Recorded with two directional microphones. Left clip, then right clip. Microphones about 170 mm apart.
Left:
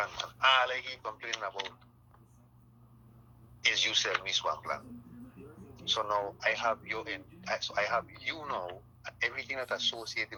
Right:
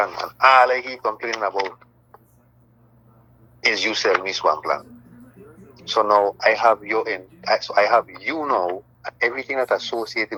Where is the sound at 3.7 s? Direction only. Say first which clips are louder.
Right 10 dB; 35° right (ahead or behind).